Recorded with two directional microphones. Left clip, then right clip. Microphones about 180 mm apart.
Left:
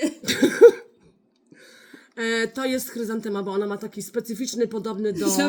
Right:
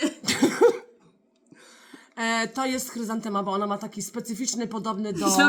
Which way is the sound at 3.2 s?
10° right (ahead or behind).